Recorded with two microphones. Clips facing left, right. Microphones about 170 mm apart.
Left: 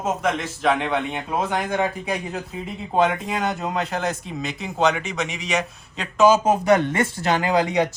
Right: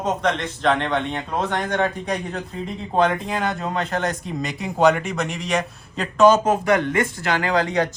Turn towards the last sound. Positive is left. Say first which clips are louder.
# left 1 dB
turn(degrees=10)  # may be behind; listen again after turning